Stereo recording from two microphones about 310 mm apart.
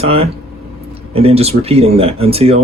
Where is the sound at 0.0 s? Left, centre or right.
Centre.